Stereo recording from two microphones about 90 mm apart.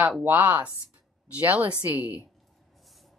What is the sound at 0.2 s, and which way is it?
Speech, 20° right (ahead or behind).